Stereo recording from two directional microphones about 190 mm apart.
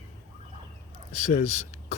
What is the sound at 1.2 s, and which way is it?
Speech, 35° left (ahead or behind).